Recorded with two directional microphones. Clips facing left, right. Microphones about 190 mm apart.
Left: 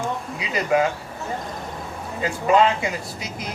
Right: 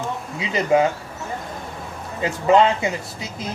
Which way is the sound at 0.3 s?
25° right (ahead or behind).